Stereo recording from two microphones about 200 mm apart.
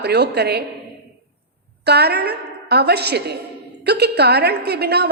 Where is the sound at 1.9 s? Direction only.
55° right (ahead or behind).